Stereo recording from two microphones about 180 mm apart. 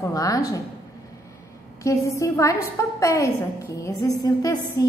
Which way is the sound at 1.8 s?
15° left (ahead or behind).